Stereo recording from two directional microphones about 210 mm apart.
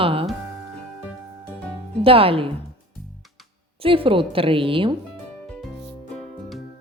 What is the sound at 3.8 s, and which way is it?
Speech, 25° right (ahead or behind).